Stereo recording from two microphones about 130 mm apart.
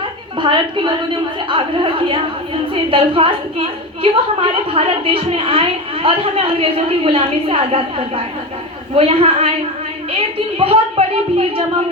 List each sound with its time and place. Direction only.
0.3 s a woman's voice: 40° right (ahead or behind)